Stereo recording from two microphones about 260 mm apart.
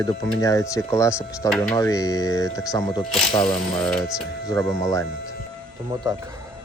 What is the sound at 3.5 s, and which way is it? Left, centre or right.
Speech, centre.